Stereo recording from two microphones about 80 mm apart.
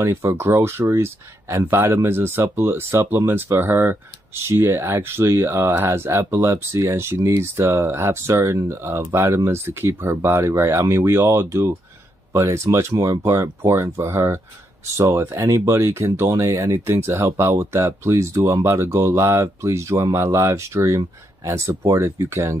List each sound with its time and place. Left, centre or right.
0.0 s speech: right